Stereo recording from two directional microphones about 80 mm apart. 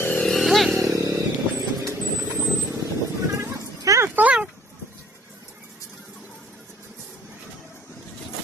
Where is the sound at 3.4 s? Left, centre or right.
Right.